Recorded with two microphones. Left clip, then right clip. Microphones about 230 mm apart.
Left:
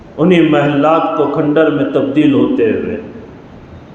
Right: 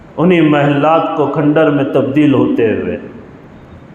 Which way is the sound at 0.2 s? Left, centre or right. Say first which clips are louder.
Even; right.